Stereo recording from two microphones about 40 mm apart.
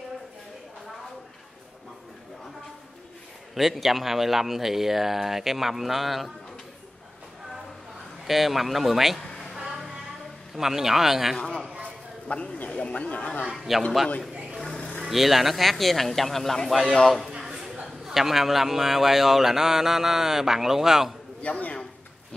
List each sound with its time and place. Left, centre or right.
3.5 s a man's voice: centre
8.3 s speech: centre
9.7 s a sound: centre
10.5 s a man's voice: centre
11.3 s a man's voice: centre; by 13.5 s left
13.5 s a sound: centre
14.5 s music: centre
15.0 s speech: centre
17.4 s a sound: centre
18.0 s a man's voice: centre
21.4 s speech: left